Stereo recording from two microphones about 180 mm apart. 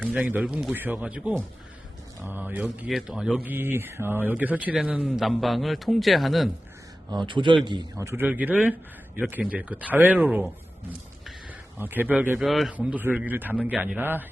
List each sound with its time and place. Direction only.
0.0 s a man's voice: 5° right (ahead or behind)
7.3 s a man's voice: 25° right (ahead or behind); by 10.5 s 10° right (ahead or behind)
11.8 s a man's voice: 10° right (ahead or behind)